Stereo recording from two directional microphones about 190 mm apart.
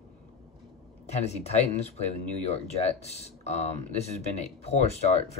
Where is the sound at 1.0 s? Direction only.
35° left (ahead or behind).